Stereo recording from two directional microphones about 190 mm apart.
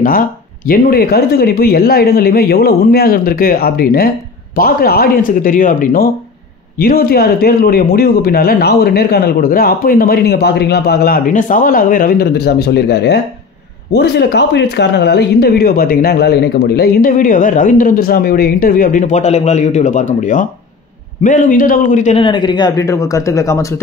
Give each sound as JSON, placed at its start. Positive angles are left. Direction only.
{"t": 0.7, "sound": "speech", "side_deg": 50}
{"t": 22.2, "sound": "a man's voice", "side_deg": 25}